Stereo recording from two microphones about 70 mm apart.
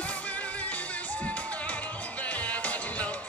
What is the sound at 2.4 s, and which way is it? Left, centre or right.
Music, left.